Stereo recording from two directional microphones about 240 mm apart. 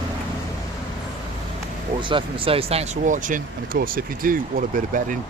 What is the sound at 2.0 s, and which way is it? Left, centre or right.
Speech, right.